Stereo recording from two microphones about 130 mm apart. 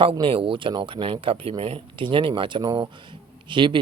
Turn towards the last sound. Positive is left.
turn(degrees=-40)  # may be behind; listen again after turning